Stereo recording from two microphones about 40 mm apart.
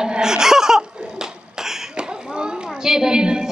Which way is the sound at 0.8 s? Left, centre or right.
Right.